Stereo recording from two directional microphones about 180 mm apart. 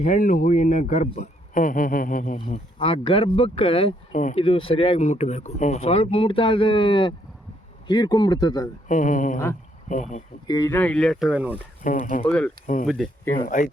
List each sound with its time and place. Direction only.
0.0 s a man's voice: 45° left (ahead or behind)
2.7 s speech: 30° left (ahead or behind)
4.1 s a man's voice: 45° left (ahead or behind)
4.4 s speech: 30° left (ahead or behind)
8.9 s a man's voice: 45° left (ahead or behind)
10.4 s speech: 20° left (ahead or behind); by 11.5 s 5° right (ahead or behind)
11.8 s a man's voice: 45° left (ahead or behind)
12.2 s speech: 5° left (ahead or behind)
12.6 s a man's voice: 45° left (ahead or behind)